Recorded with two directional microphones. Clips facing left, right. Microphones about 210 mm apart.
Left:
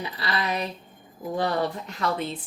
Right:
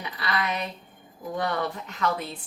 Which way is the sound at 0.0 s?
30° left (ahead or behind).